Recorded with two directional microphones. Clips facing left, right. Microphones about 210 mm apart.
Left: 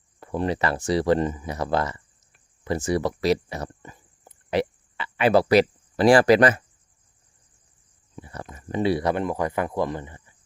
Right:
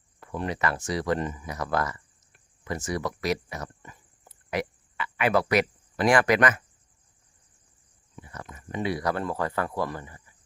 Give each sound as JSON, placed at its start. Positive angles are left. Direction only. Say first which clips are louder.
{"t": 0.2, "sound": "speech", "louder": "left 5 dB", "side_deg": 30}
{"t": 8.1, "sound": "speech", "louder": "left 4 dB", "side_deg": 30}